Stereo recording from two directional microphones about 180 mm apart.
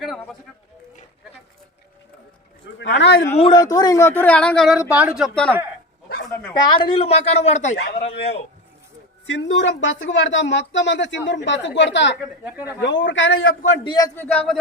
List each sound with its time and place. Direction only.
2.7 s speech: 75° left (ahead or behind)
3.3 s speech: 25° left (ahead or behind); by 5.5 s 5° left (ahead or behind)
6.5 s a woman's voice: 25° left (ahead or behind)
9.2 s a woman's voice: 90° left
12.2 s speech: 5° right (ahead or behind)
12.8 s a woman's voice: 85° left
13.8 s a man's voice: 25° left (ahead or behind)
14.2 s speech: 10° left (ahead or behind)